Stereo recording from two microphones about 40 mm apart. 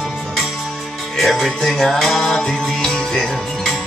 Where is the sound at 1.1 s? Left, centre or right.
Centre.